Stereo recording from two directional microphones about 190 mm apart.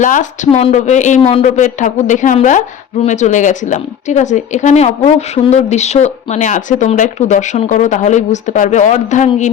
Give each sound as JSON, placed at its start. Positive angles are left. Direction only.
{"t": 0.0, "sound": "a woman's voice", "side_deg": 40}